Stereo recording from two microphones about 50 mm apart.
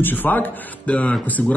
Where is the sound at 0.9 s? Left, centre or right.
Left.